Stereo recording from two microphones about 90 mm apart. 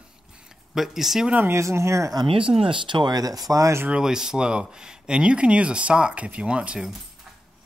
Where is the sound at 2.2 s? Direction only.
80° right; by 3.8 s 40° right (ahead or behind).